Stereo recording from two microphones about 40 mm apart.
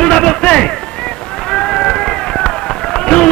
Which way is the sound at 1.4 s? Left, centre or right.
Centre.